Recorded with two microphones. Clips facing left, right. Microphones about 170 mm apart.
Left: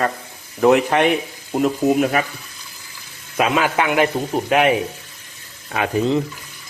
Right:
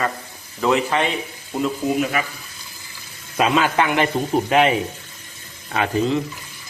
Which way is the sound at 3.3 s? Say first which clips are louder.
Even; 5° left (ahead or behind).